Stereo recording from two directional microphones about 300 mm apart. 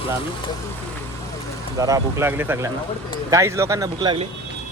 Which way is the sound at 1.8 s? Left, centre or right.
Centre.